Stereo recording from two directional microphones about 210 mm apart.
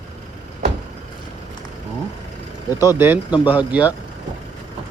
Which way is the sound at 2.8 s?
10° right (ahead or behind).